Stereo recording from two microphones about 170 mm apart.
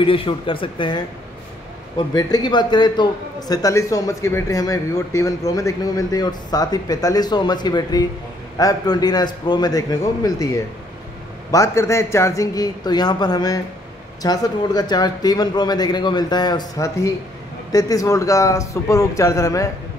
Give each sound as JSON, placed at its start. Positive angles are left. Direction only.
{"t": 0.0, "sound": "a man's voice", "side_deg": 30}